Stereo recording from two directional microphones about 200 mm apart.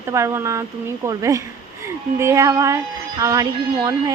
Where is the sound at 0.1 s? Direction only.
15° right (ahead or behind).